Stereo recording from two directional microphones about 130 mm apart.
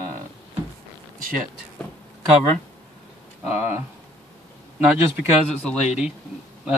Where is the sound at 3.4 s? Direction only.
15° right (ahead or behind).